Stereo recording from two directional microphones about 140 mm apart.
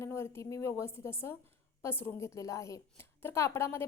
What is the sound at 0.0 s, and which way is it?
A woman's voice, 20° left (ahead or behind).